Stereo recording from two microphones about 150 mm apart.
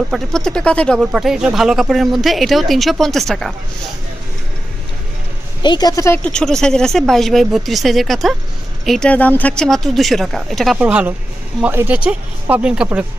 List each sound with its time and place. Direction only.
0.1 s speech: 5° left (ahead or behind)
1.1 s speech: 5° right (ahead or behind)
5.6 s speech: 30° left (ahead or behind); by 13.0 s 5° right (ahead or behind)